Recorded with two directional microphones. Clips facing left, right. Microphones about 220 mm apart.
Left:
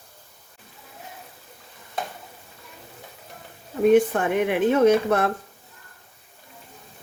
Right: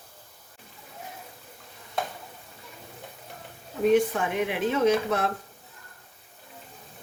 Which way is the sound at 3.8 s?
50° left (ahead or behind).